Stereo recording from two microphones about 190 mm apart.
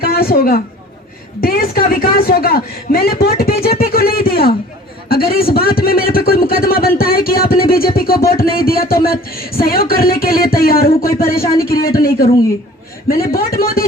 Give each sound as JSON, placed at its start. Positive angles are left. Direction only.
{"t": 0.0, "sound": "a man's voice", "side_deg": 50}
{"t": 13.1, "sound": "a man's voice", "side_deg": 50}